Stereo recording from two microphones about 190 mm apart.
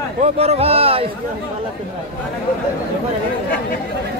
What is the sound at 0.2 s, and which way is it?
Speech, 35° right (ahead or behind).